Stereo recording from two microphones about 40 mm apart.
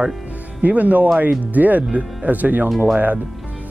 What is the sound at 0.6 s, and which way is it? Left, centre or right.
Speech, right.